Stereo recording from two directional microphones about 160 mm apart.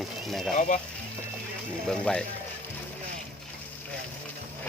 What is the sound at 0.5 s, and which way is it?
Speech, 50° left (ahead or behind).